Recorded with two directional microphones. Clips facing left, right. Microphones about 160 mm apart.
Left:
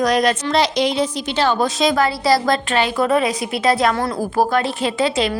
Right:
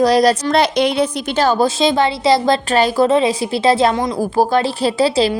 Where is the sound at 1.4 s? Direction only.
35° right (ahead or behind).